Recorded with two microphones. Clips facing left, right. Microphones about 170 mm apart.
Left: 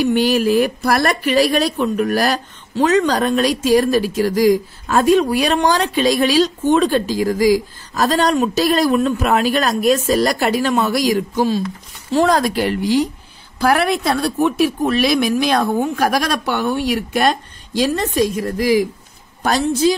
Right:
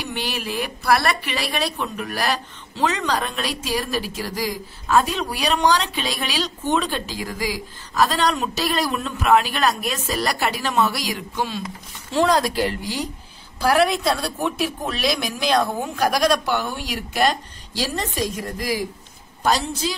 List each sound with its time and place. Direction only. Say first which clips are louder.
0.0 s a woman's voice: left 14 dB; 45° left (ahead or behind)
19.4 s a woman's voice: left 7 dB; 50° left (ahead or behind)